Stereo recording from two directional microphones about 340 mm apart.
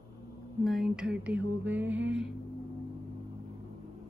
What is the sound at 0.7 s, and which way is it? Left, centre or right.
Speech, centre.